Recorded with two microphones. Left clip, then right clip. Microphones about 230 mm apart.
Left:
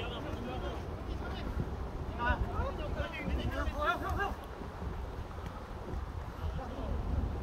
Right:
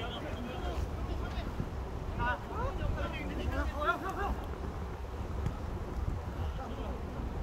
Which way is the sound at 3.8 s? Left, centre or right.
Left.